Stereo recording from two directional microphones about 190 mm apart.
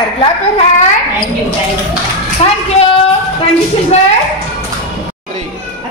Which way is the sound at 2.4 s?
35° left (ahead or behind).